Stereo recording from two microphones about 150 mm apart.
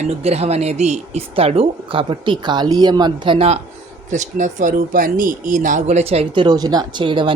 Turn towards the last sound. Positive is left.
turn(degrees=-35)  # may be behind; listen again after turning